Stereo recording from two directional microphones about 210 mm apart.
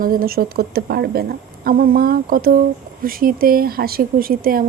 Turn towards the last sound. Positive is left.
turn(degrees=-45)  # may be behind; listen again after turning